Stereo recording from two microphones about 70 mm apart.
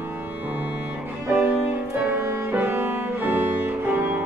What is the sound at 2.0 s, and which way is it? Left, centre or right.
Music, right.